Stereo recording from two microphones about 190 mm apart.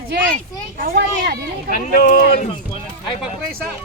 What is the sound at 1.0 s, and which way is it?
Speech, 60° right (ahead or behind).